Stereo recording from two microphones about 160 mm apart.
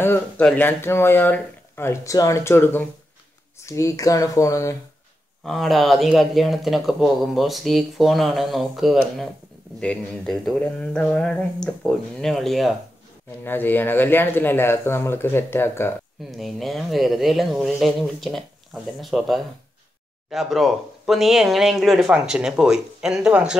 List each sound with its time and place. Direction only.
0.0 s speech: 15° left (ahead or behind)
5.4 s speech: centre (ahead or behind)
13.4 s speech: 10° left (ahead or behind)
16.3 s speech: centre (ahead or behind)